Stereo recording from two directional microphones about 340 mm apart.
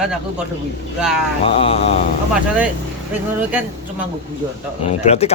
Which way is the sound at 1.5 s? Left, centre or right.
Centre.